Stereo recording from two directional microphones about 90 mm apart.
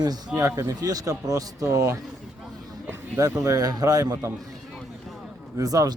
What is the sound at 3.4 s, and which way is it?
Speech, 40° right (ahead or behind).